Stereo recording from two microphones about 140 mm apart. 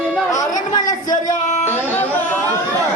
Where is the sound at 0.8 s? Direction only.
65° left (ahead or behind).